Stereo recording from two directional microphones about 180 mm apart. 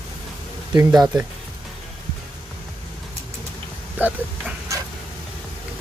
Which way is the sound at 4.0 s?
10° right (ahead or behind).